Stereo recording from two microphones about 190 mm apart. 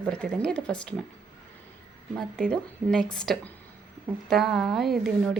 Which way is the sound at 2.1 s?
5° left (ahead or behind).